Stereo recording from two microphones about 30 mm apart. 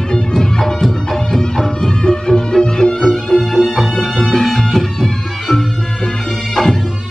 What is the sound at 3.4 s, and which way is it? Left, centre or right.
Music, centre.